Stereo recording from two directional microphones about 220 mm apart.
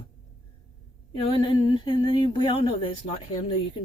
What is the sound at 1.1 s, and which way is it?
Speech, 25° left (ahead or behind).